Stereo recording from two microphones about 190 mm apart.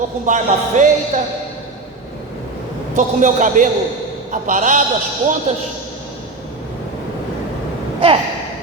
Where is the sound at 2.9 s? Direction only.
40° right (ahead or behind).